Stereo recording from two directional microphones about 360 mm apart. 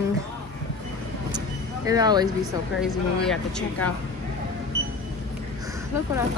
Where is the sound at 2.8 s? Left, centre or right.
Centre.